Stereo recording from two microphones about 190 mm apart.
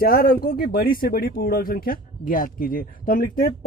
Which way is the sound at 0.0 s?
50° left (ahead or behind).